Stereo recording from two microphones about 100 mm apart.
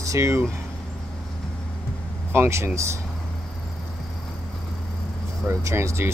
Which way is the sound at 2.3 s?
25° right (ahead or behind).